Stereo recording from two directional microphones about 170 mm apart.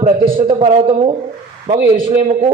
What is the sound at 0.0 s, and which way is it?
A man's voice, 40° right (ahead or behind).